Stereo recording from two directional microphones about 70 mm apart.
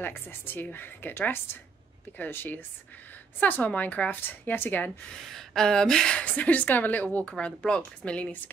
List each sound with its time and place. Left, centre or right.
0.0 s a woman's voice: left
5.1 s a woman's voice: centre